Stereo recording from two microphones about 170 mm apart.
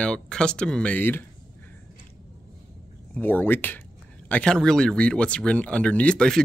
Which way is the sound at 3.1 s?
10° left (ahead or behind).